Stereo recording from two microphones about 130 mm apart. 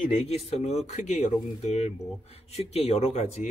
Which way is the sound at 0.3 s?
55° left (ahead or behind).